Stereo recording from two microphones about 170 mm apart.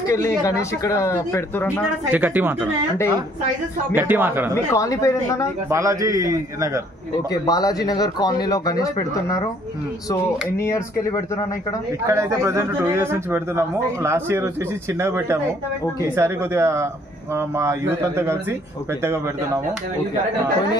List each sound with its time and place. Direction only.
0.1 s speech: 15° left (ahead or behind)
1.8 s speech: 10° right (ahead or behind)
3.9 s speech: 10° right (ahead or behind)
4.7 s speech: 20° left (ahead or behind)
5.7 s a man's voice: 20° right (ahead or behind)
7.4 s speech: 20° left (ahead or behind)
10.6 s speech: 15° left (ahead or behind)
12.1 s speech: 15° right (ahead or behind)